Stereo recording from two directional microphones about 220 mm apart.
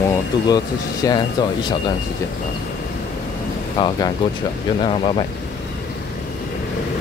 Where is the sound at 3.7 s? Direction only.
25° left (ahead or behind).